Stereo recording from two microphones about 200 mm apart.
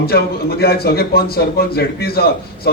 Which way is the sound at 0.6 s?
50° left (ahead or behind).